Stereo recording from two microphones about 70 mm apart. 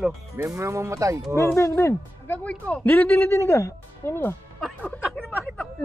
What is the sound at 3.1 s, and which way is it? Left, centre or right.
Speech, left.